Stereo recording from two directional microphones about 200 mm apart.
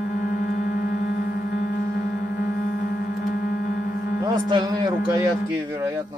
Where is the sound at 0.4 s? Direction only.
45° left (ahead or behind).